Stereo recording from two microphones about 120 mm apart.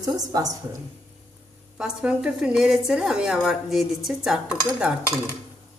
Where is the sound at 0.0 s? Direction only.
30° right (ahead or behind).